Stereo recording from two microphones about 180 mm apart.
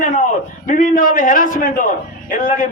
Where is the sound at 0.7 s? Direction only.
50° left (ahead or behind).